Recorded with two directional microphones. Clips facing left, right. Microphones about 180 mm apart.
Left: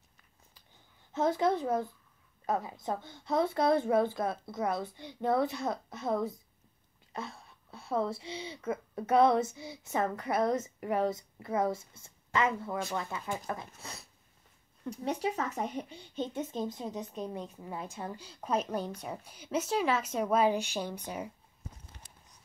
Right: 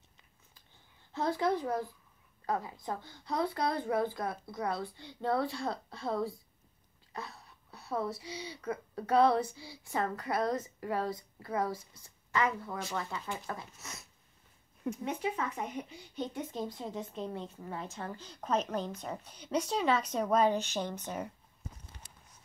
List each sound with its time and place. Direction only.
1.1 s speech: 20° left (ahead or behind)
14.9 s speech: 35° left (ahead or behind); by 21.3 s 10° left (ahead or behind)